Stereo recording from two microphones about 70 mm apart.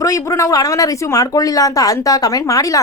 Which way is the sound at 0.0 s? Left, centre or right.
Left.